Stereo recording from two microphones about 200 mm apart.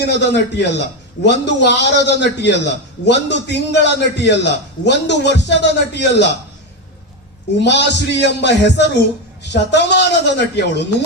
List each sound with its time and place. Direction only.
0.0 s a man's voice: 60° left (ahead or behind)
7.6 s a man's voice: 60° left (ahead or behind)